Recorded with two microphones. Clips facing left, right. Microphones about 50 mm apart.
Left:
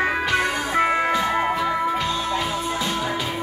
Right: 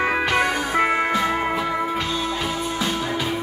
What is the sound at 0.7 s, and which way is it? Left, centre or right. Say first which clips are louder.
Music: left 2 dB; centre.